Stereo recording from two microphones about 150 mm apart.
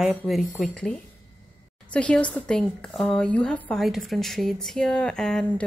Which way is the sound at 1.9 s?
5° left (ahead or behind).